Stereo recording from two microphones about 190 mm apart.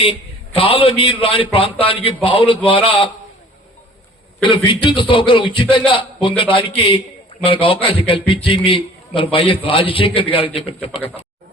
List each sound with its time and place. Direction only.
0.0 s a man's voice: 30° left (ahead or behind)
4.4 s a man's voice: 25° left (ahead or behind)